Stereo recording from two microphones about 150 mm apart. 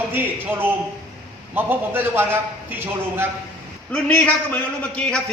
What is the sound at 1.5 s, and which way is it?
A man's voice, 15° right (ahead or behind).